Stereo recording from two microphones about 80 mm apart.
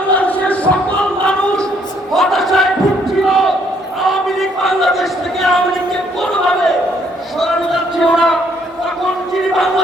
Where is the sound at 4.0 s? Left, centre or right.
Centre.